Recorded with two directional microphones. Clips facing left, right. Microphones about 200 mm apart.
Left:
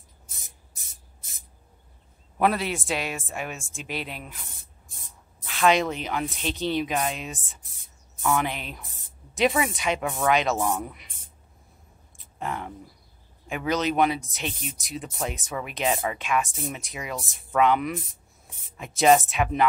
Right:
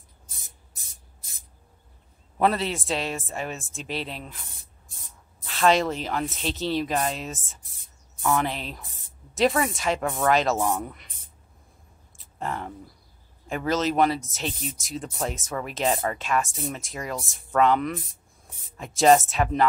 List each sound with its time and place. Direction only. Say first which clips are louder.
2.3 s speech: even; 5° left (ahead or behind)
5.5 s speech: right 1 dB; centre (ahead or behind)
12.4 s speech: right 1 dB; 5° left (ahead or behind)